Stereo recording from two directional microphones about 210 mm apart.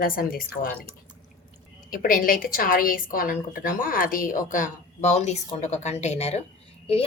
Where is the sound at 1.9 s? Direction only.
45° left (ahead or behind).